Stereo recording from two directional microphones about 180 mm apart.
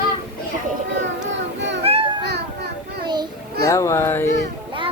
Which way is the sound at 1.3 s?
90° right.